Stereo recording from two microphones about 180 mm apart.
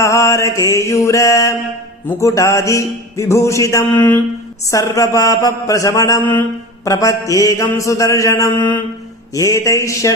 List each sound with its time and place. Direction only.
0.0 s mantra: 15° left (ahead or behind)